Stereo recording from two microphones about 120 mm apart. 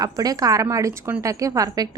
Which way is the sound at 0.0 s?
30° right (ahead or behind).